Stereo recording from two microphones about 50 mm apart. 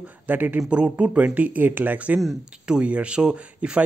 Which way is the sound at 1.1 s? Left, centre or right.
Right.